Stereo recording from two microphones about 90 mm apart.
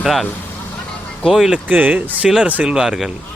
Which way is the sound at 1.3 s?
5° right (ahead or behind).